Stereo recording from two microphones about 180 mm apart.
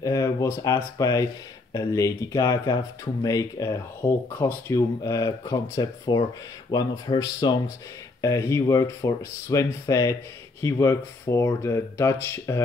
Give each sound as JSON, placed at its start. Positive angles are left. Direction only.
{"t": 0.0, "sound": "speech", "side_deg": 20}